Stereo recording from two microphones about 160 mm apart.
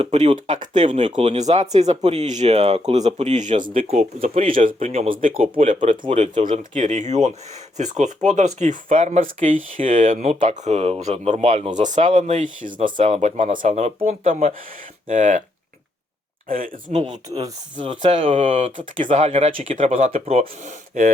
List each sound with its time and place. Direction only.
0.0 s speech: 45° right (ahead or behind)
0.3 s speech: 55° right (ahead or behind)
0.9 s speech: 30° right (ahead or behind)
1.2 s speech: 45° right (ahead or behind)
3.6 s speech: 40° right (ahead or behind)
4.5 s speech: 60° right (ahead or behind)
4.9 s speech: 40° right (ahead or behind)
5.6 s speech: 50° right (ahead or behind)
13.0 s speech: 40° right (ahead or behind)
16.5 s speech: 60° right (ahead or behind)
17.2 s speech: 20° right (ahead or behind)
18.0 s speech: 35° right (ahead or behind)
18.8 s speech: 55° right (ahead or behind)
20.1 s speech: 40° right (ahead or behind)